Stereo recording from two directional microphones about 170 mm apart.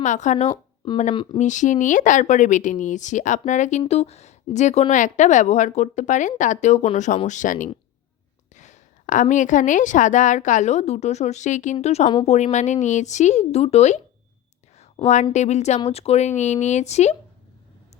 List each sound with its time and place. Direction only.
0.0 s speech: 45° left (ahead or behind)
0.4 s a sound: 20° left (ahead or behind)
1.1 s speech: 30° left (ahead or behind)
1.4 s a woman's voice: 45° left (ahead or behind)